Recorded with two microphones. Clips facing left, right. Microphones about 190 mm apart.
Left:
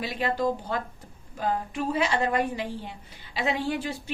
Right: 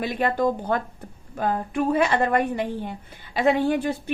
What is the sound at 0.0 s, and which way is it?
A woman's voice, 55° right (ahead or behind).